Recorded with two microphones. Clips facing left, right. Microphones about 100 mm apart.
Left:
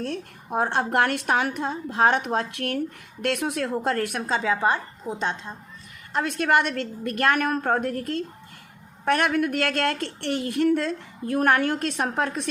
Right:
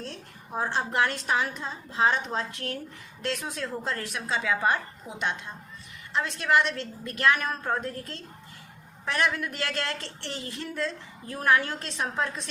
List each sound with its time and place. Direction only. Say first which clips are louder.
0.0 s a woman's voice: left 9 dB; 60° left (ahead or behind)
4.4 s a woman's voice: left 2 dB; 30° left (ahead or behind)
6.1 s a woman's voice: left 3 dB; 55° left (ahead or behind)